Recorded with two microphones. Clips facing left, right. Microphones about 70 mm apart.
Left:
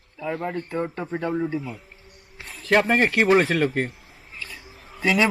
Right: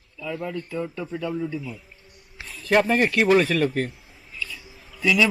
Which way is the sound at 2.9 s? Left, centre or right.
Left.